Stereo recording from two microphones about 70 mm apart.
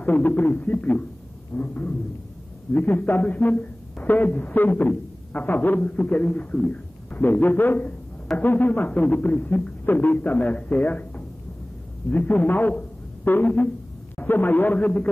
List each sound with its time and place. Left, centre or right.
0.0 s a man's voice: left